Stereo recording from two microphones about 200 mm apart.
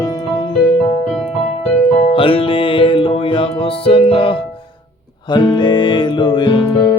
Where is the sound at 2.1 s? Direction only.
25° left (ahead or behind).